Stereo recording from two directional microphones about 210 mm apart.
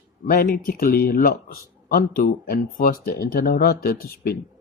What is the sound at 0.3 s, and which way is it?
A man's voice, 45° left (ahead or behind).